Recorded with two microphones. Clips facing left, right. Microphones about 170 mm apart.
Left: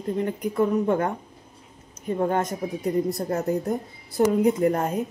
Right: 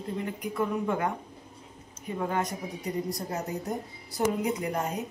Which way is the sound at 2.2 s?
45° left (ahead or behind).